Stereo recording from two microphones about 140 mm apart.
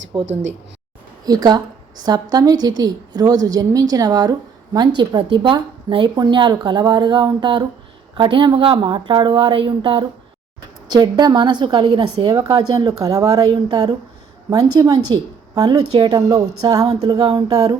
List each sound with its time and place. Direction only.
0.1 s a woman's voice: 35° right (ahead or behind)